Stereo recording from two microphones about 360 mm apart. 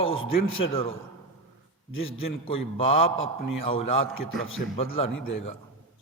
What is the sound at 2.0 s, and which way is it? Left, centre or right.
A man's voice, centre.